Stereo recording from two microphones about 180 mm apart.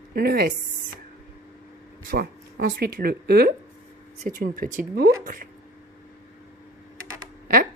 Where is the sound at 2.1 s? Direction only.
55° right (ahead or behind).